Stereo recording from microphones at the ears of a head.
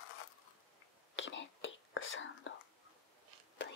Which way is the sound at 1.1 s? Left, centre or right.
Left.